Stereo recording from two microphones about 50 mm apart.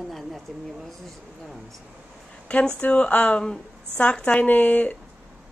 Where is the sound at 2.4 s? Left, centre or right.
Left.